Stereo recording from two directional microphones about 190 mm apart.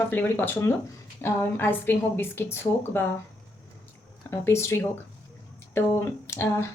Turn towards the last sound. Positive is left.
turn(degrees=15)  # may be behind; listen again after turning